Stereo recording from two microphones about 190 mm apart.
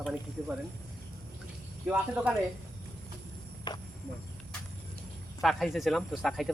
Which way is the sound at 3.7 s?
20° left (ahead or behind).